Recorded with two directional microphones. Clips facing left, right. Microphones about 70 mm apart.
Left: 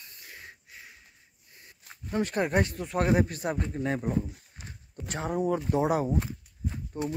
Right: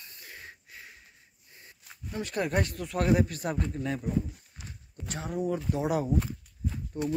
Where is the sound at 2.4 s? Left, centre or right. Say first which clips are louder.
Left 3 dB; left.